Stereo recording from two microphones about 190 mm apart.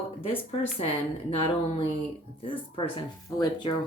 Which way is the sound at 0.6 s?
30° left (ahead or behind).